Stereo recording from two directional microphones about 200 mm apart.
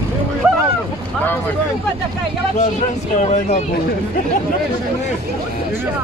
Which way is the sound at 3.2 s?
35° left (ahead or behind).